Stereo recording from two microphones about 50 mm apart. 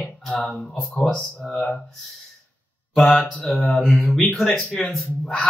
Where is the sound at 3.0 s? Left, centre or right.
Centre.